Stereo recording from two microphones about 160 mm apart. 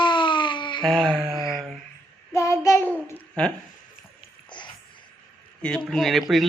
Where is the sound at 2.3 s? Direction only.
15° left (ahead or behind).